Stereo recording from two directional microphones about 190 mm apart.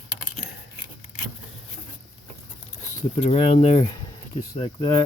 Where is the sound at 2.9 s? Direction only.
35° left (ahead or behind).